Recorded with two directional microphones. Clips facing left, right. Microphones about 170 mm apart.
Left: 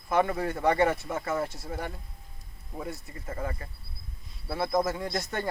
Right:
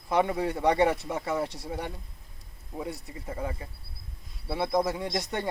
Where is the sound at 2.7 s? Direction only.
15° right (ahead or behind).